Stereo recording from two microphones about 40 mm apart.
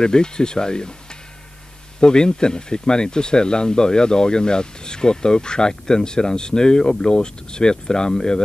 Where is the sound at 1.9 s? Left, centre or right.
Centre.